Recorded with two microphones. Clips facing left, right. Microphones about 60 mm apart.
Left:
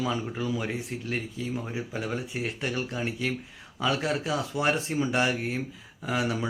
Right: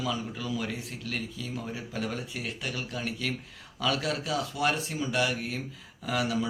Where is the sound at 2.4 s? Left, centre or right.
Left.